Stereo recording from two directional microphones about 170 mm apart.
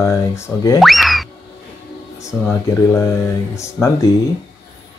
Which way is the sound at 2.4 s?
15° left (ahead or behind).